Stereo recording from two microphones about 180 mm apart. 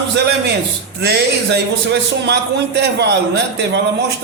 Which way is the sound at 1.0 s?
65° right (ahead or behind).